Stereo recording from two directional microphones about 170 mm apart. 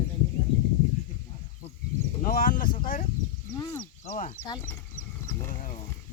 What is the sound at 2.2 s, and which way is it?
Speech, 55° left (ahead or behind).